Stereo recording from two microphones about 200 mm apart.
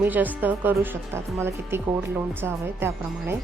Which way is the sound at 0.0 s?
10° right (ahead or behind).